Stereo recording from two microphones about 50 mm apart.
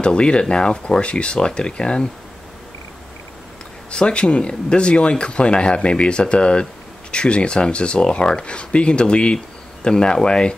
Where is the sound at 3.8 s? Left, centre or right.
Left.